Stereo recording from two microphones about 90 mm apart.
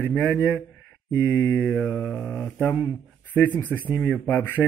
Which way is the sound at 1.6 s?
10° left (ahead or behind).